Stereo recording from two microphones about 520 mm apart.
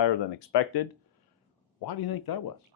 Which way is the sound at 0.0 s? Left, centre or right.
Left.